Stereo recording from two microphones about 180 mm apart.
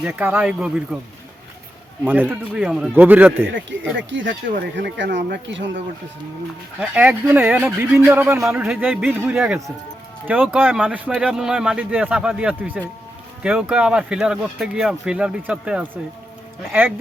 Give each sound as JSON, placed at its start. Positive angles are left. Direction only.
{"t": 0.0, "sound": "speech", "side_deg": -10}
{"t": 2.0, "sound": "speech", "side_deg": -10}
{"t": 3.9, "sound": "speech", "side_deg": -90}
{"t": 6.7, "sound": "speech", "side_deg": -5}